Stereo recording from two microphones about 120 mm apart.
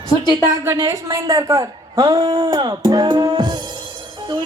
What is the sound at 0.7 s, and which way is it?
A man's voice, 30° right (ahead or behind).